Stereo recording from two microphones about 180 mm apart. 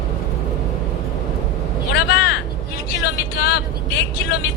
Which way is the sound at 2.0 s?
70° left (ahead or behind).